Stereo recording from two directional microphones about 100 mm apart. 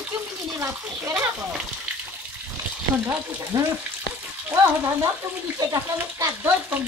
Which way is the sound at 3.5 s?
40° right (ahead or behind).